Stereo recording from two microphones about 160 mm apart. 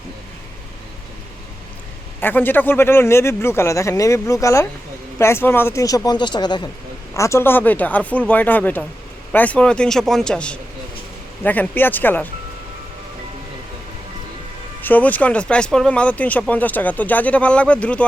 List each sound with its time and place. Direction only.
2.2 s speech: 10° left (ahead or behind)
14.8 s speech: 10° left (ahead or behind)